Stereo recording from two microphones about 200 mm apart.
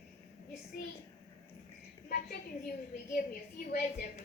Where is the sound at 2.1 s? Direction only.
50° left (ahead or behind).